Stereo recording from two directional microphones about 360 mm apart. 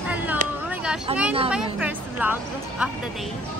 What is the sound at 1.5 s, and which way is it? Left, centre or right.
Speech, centre.